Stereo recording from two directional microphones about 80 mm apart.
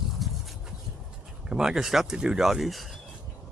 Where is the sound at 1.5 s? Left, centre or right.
Centre.